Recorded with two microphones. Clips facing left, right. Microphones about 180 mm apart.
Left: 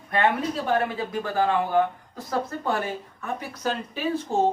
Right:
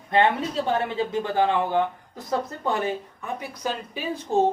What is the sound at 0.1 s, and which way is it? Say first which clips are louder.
Speech: right 2 dB; 25° right (ahead or behind).